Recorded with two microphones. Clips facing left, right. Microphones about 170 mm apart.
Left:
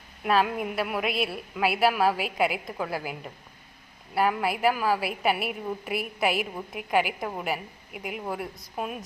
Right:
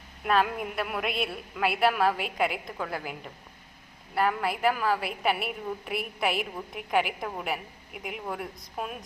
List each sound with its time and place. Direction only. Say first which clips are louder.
0.3 s a woman's voice: left 2 dB; 5° left (ahead or behind)